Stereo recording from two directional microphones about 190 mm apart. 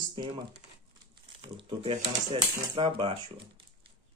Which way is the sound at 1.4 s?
30° right (ahead or behind).